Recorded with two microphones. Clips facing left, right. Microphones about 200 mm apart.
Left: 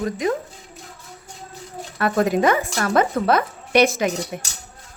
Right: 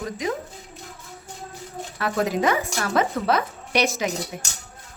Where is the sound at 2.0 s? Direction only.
55° left (ahead or behind).